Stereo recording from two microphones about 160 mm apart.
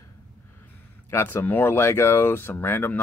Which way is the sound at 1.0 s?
15° left (ahead or behind).